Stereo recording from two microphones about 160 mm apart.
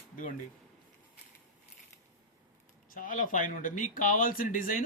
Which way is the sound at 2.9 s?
55° left (ahead or behind).